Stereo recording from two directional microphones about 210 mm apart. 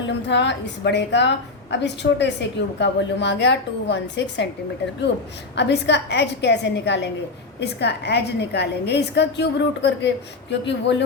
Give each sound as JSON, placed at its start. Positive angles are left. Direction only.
{"t": 0.3, "sound": "a woman's voice", "side_deg": 55}
{"t": 5.5, "sound": "a woman's voice", "side_deg": 55}